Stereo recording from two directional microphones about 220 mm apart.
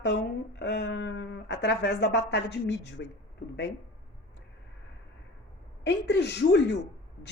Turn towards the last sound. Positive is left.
turn(degrees=50)  # may be behind; listen again after turning